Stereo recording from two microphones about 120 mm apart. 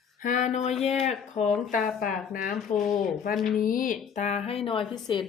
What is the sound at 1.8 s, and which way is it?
Speech, centre (ahead or behind).